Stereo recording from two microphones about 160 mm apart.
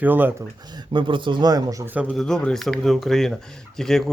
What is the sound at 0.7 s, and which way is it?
Speech, 30° right (ahead or behind).